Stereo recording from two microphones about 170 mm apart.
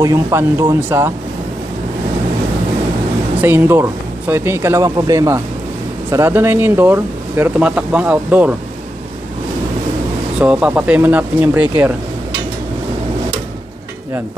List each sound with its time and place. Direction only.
0.0 s speech: 20° right (ahead or behind)
3.3 s speech: 15° right (ahead or behind)
10.4 s speech: 10° right (ahead or behind)